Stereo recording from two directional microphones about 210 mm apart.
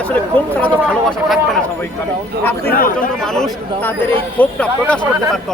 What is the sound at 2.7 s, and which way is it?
Speech, 45° left (ahead or behind).